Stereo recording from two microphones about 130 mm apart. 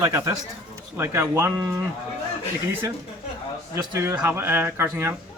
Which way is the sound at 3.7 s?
25° right (ahead or behind).